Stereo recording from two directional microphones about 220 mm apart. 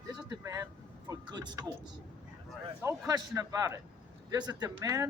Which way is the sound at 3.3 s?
15° right (ahead or behind).